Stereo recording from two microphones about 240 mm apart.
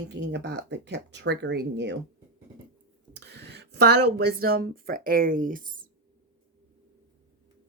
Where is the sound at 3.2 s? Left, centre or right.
Right.